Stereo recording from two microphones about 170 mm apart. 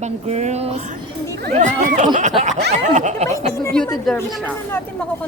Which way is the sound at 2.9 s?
45° right (ahead or behind).